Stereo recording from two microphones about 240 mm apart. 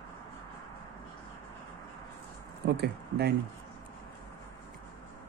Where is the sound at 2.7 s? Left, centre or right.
Right.